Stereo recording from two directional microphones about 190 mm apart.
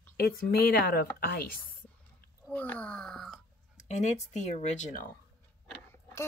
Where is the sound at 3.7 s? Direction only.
35° left (ahead or behind).